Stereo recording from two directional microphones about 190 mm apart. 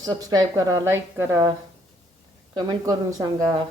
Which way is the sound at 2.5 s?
20° right (ahead or behind).